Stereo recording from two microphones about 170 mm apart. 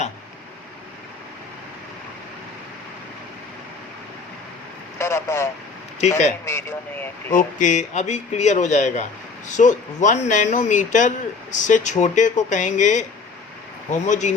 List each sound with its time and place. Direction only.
4.9 s speech: 15° left (ahead or behind)
6.0 s speech: 40° left (ahead or behind)
6.4 s speech: 15° left (ahead or behind)
7.3 s speech: 50° left (ahead or behind)